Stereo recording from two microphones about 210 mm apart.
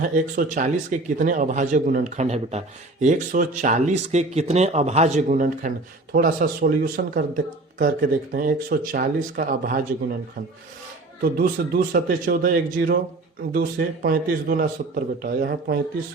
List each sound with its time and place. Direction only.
0.0 s speech: 40° right (ahead or behind)
11.2 s speech: 45° right (ahead or behind)